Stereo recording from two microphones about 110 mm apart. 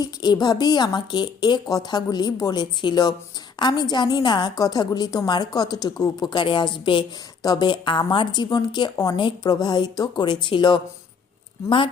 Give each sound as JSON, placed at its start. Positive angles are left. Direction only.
{"t": 0.0, "sound": "a woman's voice", "side_deg": 40}